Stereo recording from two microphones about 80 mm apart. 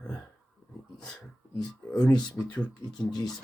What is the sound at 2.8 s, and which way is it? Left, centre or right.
Speech, left.